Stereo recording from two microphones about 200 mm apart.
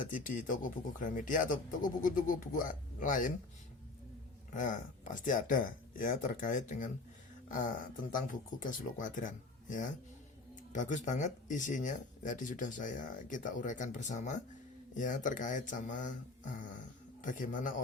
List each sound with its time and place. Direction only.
0.4 s speech: 40° left (ahead or behind)
4.5 s speech: 40° left (ahead or behind)
7.4 s a sound: 40° left (ahead or behind)
8.1 s speech: 40° left (ahead or behind)